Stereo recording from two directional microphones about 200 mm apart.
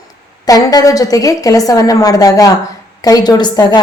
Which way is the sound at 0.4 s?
20° left (ahead or behind).